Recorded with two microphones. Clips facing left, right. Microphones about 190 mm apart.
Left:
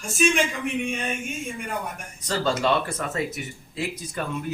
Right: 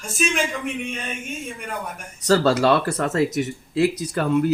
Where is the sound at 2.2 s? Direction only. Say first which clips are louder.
Right 7 dB; 75° right (ahead or behind).